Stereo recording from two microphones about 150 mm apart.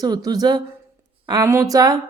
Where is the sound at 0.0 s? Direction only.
25° right (ahead or behind).